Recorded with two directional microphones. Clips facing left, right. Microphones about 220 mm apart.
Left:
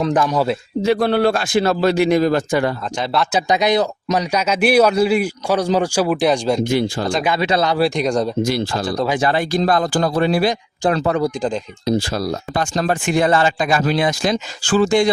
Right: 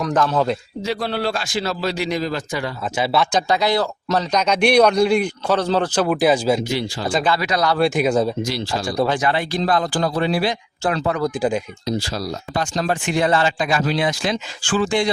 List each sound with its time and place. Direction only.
0.1 s a man's voice: 15° left (ahead or behind)
0.8 s a man's voice: 55° left (ahead or behind)
2.9 s speech: 5° right (ahead or behind)
3.3 s a man's voice: 20° left (ahead or behind); by 6.6 s 5° right (ahead or behind)
6.7 s speech: 50° left (ahead or behind)
7.3 s speech: 25° left (ahead or behind)
7.8 s speech: 5° right (ahead or behind)
8.4 s speech: 55° left (ahead or behind)
11.3 s speech: 10° right (ahead or behind)
11.9 s speech: 55° left (ahead or behind)